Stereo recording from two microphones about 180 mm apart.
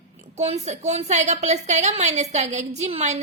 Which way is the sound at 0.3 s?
40° right (ahead or behind).